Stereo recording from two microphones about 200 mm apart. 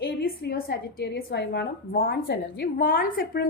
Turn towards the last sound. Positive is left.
turn(degrees=45)  # may be behind; listen again after turning